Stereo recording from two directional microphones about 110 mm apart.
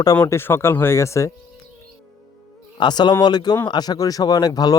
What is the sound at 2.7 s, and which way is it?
Speech, 40° left (ahead or behind).